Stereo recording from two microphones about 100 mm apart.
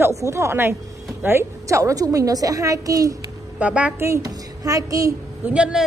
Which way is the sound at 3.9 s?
30° right (ahead or behind).